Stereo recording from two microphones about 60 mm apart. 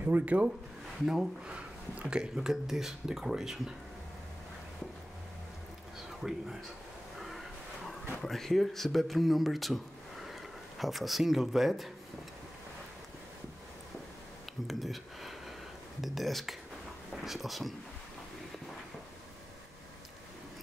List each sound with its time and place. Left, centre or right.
0.0 s speech: right
1.0 s speech: centre
1.5 s speech: centre
6.0 s speech: centre
10.8 s speech: centre
14.7 s speech: centre